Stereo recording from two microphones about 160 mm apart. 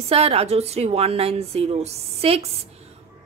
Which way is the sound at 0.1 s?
40° right (ahead or behind).